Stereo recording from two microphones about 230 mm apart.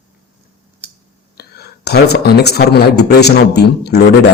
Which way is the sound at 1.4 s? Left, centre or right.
Left.